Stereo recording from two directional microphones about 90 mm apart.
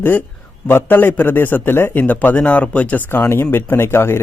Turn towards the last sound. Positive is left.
turn(degrees=25)  # may be behind; listen again after turning